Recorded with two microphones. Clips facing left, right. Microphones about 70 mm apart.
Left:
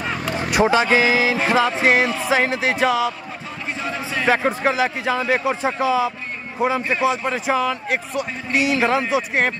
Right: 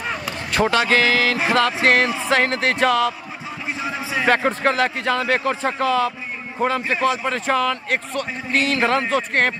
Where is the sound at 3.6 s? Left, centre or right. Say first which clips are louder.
Even; centre.